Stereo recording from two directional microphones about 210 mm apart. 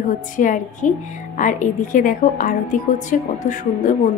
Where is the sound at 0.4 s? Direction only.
35° left (ahead or behind).